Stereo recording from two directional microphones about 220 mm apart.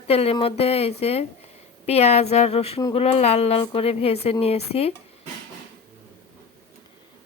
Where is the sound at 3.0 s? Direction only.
30° left (ahead or behind).